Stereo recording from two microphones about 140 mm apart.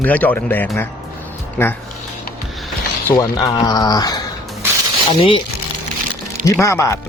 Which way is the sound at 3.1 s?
25° left (ahead or behind).